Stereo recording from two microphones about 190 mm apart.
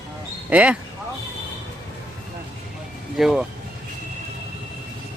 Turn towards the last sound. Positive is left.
turn(degrees=0)  # may be behind; listen again after turning